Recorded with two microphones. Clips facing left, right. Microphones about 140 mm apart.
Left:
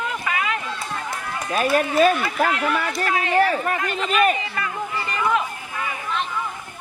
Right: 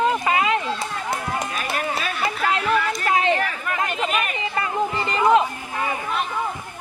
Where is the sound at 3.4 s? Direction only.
35° left (ahead or behind).